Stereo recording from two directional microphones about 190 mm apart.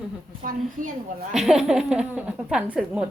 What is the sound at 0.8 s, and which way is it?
Speech, 45° right (ahead or behind).